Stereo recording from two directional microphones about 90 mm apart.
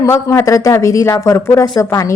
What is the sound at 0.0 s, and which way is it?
A woman's voice, 35° left (ahead or behind).